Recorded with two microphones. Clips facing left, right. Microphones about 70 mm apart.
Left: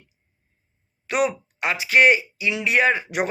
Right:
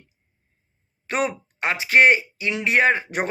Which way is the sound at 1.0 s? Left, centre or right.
Right.